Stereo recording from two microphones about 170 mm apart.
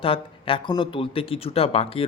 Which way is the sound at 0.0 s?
30° left (ahead or behind).